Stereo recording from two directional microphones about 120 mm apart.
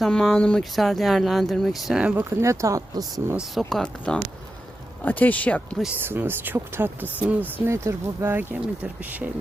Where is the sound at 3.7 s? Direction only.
5° left (ahead or behind).